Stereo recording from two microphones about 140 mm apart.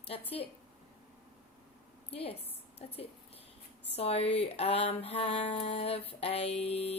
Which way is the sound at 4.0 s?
45° left (ahead or behind).